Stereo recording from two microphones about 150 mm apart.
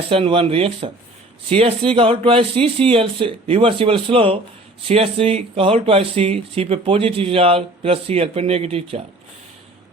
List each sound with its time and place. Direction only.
0.1 s speech: 40° right (ahead or behind)